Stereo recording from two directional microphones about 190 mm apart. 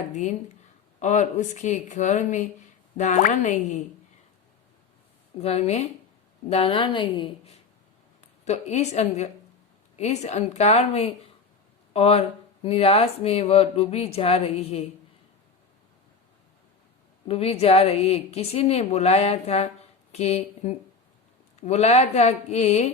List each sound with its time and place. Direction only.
0.1 s a woman's voice: 40° left (ahead or behind)
5.4 s a woman's voice: 35° left (ahead or behind)
17.2 s a woman's voice: 30° left (ahead or behind)